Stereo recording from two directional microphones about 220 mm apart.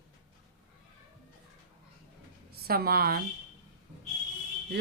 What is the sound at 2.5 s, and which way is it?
Speech, 45° right (ahead or behind).